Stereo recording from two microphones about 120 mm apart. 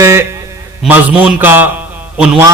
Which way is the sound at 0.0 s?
25° right (ahead or behind).